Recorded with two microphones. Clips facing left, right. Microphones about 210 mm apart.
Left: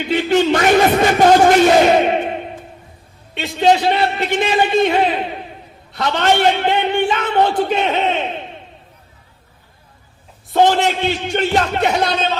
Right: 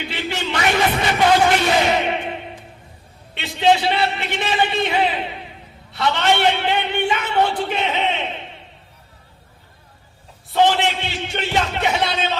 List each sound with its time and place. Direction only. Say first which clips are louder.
0.1 s music: left 15 dB; 45° left (ahead or behind)
3.4 s a man's voice: left 3 dB; 45° left (ahead or behind)
10.5 s a man's voice: left 3 dB; 45° left (ahead or behind)